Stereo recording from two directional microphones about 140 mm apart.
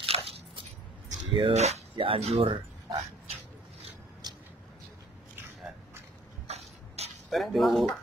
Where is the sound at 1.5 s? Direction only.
50° right (ahead or behind).